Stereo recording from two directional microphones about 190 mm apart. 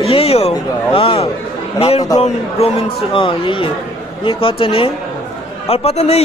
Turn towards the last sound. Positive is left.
turn(degrees=35)  # may be behind; listen again after turning